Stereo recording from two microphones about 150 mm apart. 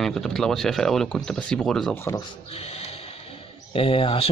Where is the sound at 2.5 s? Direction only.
45° left (ahead or behind).